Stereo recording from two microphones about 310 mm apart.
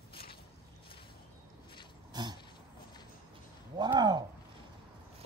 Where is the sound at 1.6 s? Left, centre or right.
Centre.